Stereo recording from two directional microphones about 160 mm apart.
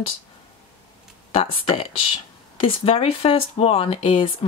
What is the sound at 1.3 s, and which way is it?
Speech, 35° left (ahead or behind).